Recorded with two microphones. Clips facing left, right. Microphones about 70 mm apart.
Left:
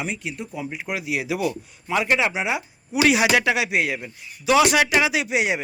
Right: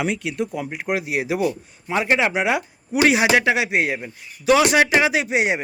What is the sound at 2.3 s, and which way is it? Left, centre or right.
Speech, right.